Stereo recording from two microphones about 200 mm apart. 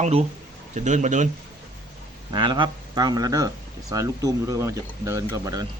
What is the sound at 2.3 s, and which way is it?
Speech, 20° right (ahead or behind).